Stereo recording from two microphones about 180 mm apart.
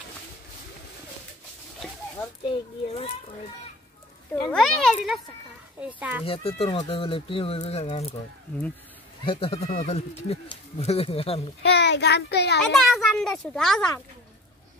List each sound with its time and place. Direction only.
2.4 s speech: 35° left (ahead or behind)
4.5 s a child's voice: 5° left (ahead or behind)
6.2 s speech: 30° left (ahead or behind)
9.2 s speech: 30° left (ahead or behind)
11.6 s a child's voice: 70° left (ahead or behind)
12.8 s a child's voice: centre (ahead or behind)